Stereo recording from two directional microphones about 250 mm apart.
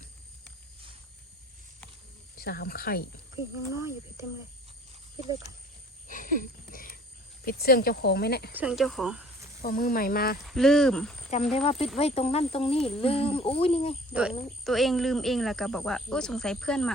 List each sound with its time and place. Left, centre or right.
2.4 s speech: left
3.8 s speech: centre
6.1 s a sound: left
7.4 s speech: left
8.5 s speech: centre
9.6 s speech: left
10.4 s speech: centre
11.5 s speech: left
14.1 s speech: centre